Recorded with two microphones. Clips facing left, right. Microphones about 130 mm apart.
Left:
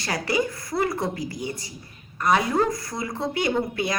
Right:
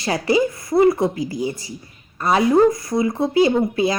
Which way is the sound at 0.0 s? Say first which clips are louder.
Right 7 dB; 25° right (ahead or behind).